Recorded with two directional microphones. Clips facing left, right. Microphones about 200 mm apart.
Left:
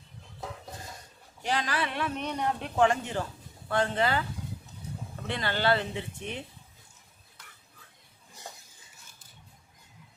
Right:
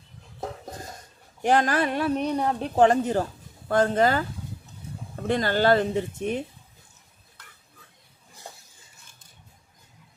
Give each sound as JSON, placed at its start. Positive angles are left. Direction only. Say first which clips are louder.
{"t": 0.3, "sound": "dishes", "louder": "right 6 dB", "side_deg": -45}
{"t": 1.4, "sound": "speech", "louder": "right 9 dB", "side_deg": -50}